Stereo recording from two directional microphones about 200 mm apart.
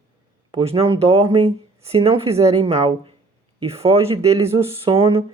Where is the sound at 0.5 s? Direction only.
25° right (ahead or behind).